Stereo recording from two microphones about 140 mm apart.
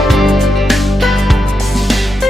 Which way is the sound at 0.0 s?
Centre (ahead or behind).